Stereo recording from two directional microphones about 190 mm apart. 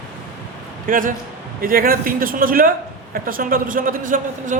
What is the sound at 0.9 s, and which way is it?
A man's voice, 45° right (ahead or behind).